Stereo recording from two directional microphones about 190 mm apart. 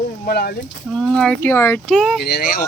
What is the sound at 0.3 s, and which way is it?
Speech, 55° left (ahead or behind).